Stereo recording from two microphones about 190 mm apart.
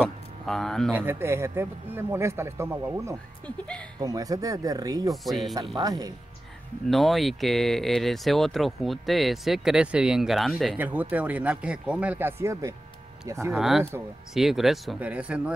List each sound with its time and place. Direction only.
0.0 s a sound: centre (ahead or behind)
0.9 s speech: 10° right (ahead or behind)
3.4 s speech: 5° left (ahead or behind)
4.0 s speech: 20° right (ahead or behind)
5.1 s speech: centre (ahead or behind)
5.8 s speech: 20° right (ahead or behind)
6.9 s speech: centre (ahead or behind)
13.5 s speech: centre (ahead or behind)